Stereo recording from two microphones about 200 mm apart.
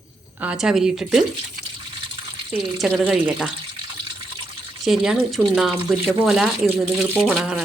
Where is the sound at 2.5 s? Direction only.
5° right (ahead or behind).